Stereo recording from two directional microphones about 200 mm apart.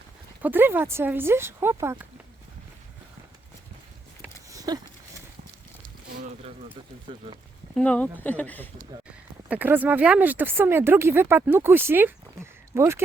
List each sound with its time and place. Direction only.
0.4 s speech: 10° right (ahead or behind)
4.4 s a sound: 20° right (ahead or behind)
7.1 s speech: 25° right (ahead or behind)
7.8 s speech: 5° left (ahead or behind)
8.9 s speech: 20° right (ahead or behind)